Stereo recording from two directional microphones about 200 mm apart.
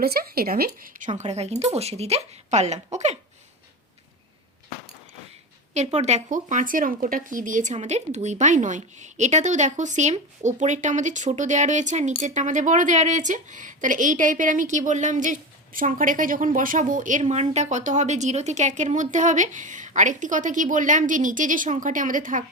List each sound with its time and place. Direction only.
0.0 s a woman's voice: 50° right (ahead or behind)
5.7 s a woman's voice: 35° right (ahead or behind)